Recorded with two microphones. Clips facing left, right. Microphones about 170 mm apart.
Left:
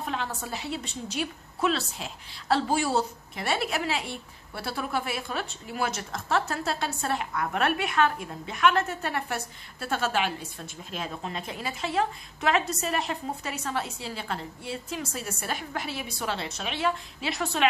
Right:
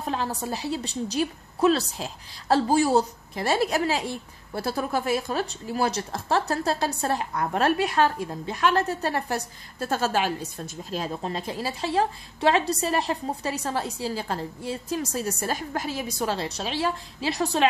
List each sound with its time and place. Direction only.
0.0 s speech: 35° right (ahead or behind)